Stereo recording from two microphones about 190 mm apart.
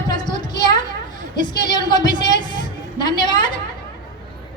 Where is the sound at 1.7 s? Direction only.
20° left (ahead or behind).